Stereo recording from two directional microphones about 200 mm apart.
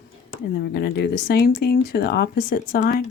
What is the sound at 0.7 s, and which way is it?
Speech, 55° left (ahead or behind).